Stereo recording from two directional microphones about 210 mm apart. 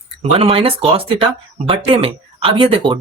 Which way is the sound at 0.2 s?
25° right (ahead or behind).